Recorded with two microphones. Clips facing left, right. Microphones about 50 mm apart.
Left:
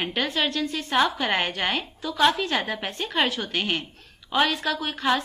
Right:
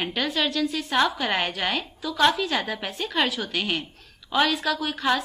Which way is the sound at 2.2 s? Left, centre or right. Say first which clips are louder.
Even; centre.